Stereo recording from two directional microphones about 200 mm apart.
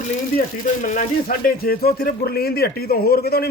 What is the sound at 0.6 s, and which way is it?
Speech, 40° left (ahead or behind).